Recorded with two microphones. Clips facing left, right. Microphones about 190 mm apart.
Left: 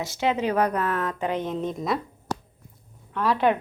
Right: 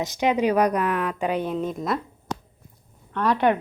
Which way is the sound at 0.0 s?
15° right (ahead or behind).